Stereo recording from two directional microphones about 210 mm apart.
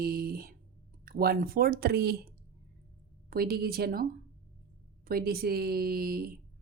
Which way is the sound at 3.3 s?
45° right (ahead or behind).